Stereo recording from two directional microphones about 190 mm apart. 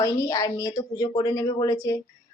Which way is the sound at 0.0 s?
20° left (ahead or behind).